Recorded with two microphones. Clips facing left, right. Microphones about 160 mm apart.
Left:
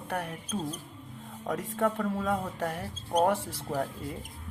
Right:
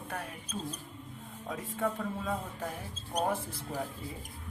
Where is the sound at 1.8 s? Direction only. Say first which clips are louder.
Left 5 dB; 70° left (ahead or behind).